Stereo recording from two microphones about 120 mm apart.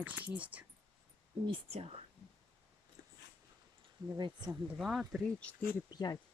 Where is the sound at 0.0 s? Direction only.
10° right (ahead or behind).